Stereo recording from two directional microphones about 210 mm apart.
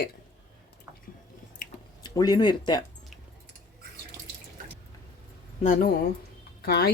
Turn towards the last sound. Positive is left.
turn(degrees=50)  # may be behind; listen again after turning